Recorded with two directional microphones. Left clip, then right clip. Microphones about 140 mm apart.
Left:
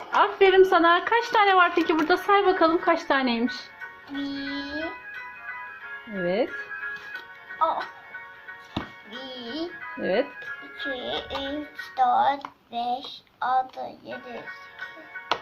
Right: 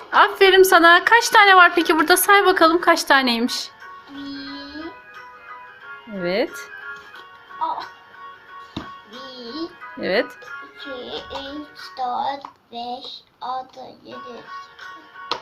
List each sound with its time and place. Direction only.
0.2 s a woman's voice: 15° right (ahead or behind)
4.4 s music: 10° left (ahead or behind)
6.2 s a woman's voice: 15° right (ahead or behind)
7.6 s speech: 5° left (ahead or behind)
9.4 s music: 15° left (ahead or behind)
10.0 s a woman's voice: 15° right (ahead or behind)
11.0 s speech: 5° left (ahead or behind)